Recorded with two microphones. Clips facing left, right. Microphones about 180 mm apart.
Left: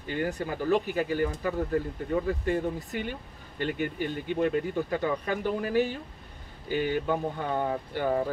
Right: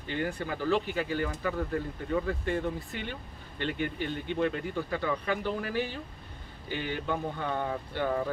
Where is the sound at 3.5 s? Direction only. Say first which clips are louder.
Left 2 dB; 45° left (ahead or behind).